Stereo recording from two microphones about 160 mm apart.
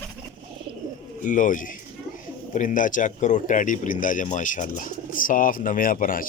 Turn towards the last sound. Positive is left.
turn(degrees=60)  # may be behind; listen again after turning